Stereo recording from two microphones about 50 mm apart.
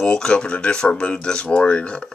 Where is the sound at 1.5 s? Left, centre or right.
Left.